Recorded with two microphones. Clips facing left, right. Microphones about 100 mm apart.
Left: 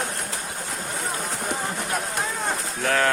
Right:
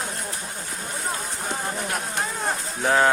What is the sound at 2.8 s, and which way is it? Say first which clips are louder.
Speech: right 3 dB; 20° right (ahead or behind).